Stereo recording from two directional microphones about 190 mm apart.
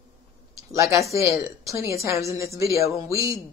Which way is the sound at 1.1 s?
15° right (ahead or behind).